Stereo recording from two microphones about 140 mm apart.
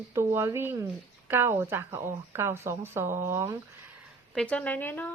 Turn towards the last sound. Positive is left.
turn(degrees=15)  # may be behind; listen again after turning